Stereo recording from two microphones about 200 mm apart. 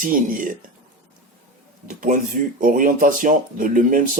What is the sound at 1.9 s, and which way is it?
Speech, 40° right (ahead or behind).